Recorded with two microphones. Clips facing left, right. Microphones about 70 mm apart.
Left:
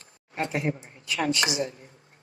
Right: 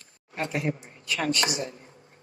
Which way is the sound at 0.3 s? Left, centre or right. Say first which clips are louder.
Left 1 dB; left.